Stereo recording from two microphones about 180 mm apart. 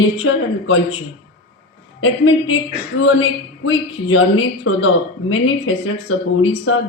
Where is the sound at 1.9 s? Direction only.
90° left.